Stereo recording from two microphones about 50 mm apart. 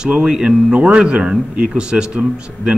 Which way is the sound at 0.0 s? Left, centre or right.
Centre.